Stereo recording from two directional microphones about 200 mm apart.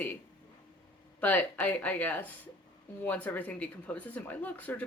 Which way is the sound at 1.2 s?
10° left (ahead or behind).